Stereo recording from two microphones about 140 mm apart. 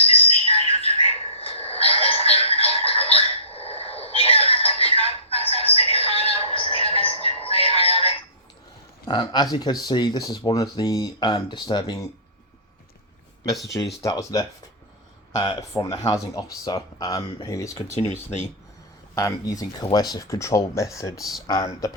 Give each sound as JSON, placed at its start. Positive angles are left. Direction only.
{"t": 0.0, "sound": "a sound", "side_deg": 45}
{"t": 5.5, "sound": "music", "side_deg": 45}
{"t": 9.0, "sound": "speech", "side_deg": 30}
{"t": 14.0, "sound": "speech", "side_deg": 25}
{"t": 17.8, "sound": "speech", "side_deg": 55}
{"t": 19.1, "sound": "speech", "side_deg": 25}